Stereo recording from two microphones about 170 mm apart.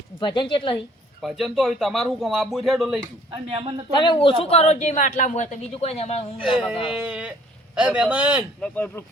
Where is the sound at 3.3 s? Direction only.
30° right (ahead or behind).